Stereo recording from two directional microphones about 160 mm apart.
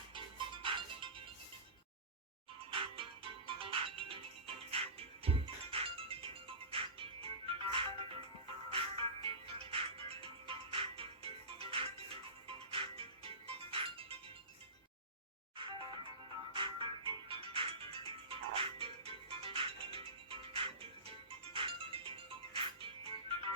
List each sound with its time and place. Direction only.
0.1 s music: 30° right (ahead or behind)
2.8 s music: 35° right (ahead or behind)
15.5 s music: 30° right (ahead or behind)